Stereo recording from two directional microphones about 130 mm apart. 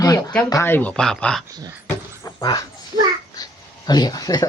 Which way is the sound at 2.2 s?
25° left (ahead or behind).